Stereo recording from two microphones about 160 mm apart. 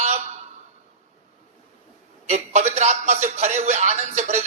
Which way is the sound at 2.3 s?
45° right (ahead or behind).